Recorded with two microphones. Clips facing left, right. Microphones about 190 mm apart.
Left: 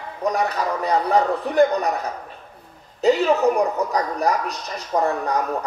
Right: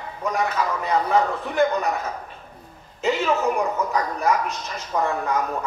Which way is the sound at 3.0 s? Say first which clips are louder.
Left 5 dB; 35° left (ahead or behind).